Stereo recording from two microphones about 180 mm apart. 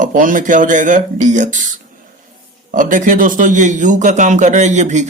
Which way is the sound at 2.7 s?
45° right (ahead or behind).